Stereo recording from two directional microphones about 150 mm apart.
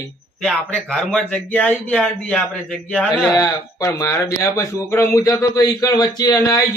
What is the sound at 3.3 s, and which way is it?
Speech, 20° left (ahead or behind).